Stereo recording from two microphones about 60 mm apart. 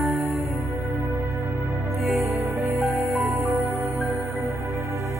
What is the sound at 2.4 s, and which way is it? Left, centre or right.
Music, right.